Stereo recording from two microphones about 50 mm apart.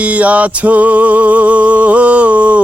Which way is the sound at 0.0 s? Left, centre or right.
Right.